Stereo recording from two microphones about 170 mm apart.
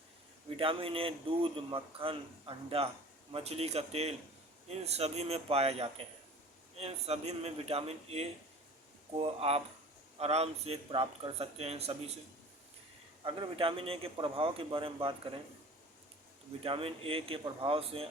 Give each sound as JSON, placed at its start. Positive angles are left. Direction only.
{"t": 0.5, "sound": "speech", "side_deg": -30}
{"t": 13.2, "sound": "speech", "side_deg": -30}
{"t": 16.6, "sound": "speech", "side_deg": -35}